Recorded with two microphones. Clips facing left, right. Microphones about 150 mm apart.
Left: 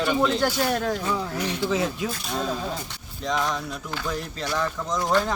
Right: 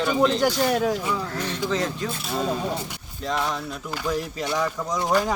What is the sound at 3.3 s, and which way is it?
Speech, 5° right (ahead or behind).